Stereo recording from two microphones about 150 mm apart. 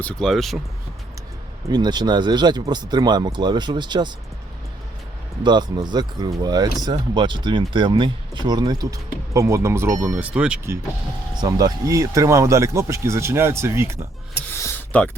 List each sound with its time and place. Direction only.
0.0 s speech: 5° left (ahead or behind)
1.7 s speech: 30° right (ahead or behind)
5.4 s speech: 30° right (ahead or behind); by 10.6 s 5° right (ahead or behind)
11.3 s speech: 25° right (ahead or behind)
14.5 s a sound: 15° left (ahead or behind)